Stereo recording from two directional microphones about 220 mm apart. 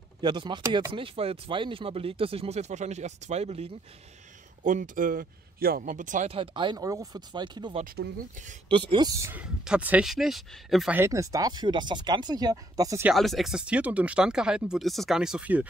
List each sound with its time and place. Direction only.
0.2 s speech: 20° right (ahead or behind)
7.8 s speech: 40° right (ahead or behind)
8.6 s speech: 20° right (ahead or behind)
13.1 s speech: centre (ahead or behind)